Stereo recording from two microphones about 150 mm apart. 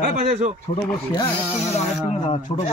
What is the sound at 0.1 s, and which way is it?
Speech, 45° right (ahead or behind).